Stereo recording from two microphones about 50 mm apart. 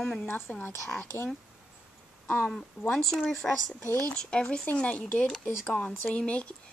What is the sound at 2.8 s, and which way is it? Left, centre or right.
Speech, centre.